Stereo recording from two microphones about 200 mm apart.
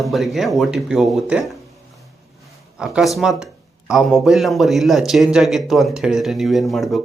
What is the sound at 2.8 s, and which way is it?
A man's voice, 5° right (ahead or behind).